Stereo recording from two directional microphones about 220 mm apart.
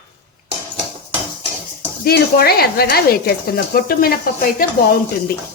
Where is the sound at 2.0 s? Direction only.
45° left (ahead or behind).